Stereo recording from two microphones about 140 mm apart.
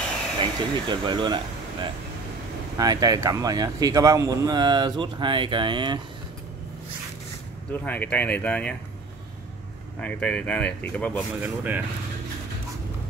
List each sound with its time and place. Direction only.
0.4 s speech: 35° right (ahead or behind)
7.7 s speech: 10° left (ahead or behind)
9.9 s speech: 10° left (ahead or behind)
11.4 s speech: 15° right (ahead or behind)